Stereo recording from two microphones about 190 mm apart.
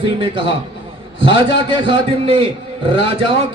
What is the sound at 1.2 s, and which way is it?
A man's voice, 25° right (ahead or behind).